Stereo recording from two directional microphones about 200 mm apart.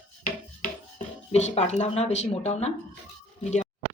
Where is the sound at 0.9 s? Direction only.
35° left (ahead or behind).